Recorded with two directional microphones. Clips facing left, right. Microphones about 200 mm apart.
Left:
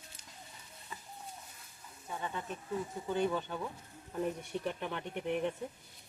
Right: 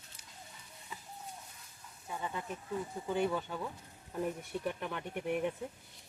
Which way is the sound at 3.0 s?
10° right (ahead or behind).